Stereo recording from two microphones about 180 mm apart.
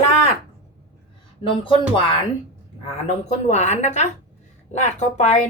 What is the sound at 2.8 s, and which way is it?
Speech, 40° left (ahead or behind).